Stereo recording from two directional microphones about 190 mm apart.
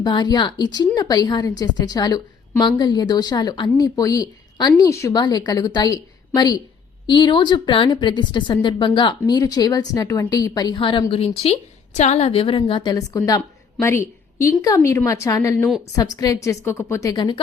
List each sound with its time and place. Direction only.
0.0 s a woman's voice: 20° left (ahead or behind)